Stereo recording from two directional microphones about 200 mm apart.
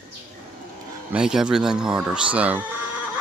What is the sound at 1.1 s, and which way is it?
Speech, 5° right (ahead or behind).